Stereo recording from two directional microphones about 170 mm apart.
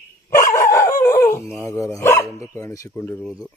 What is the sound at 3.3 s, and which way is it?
Speech, centre (ahead or behind).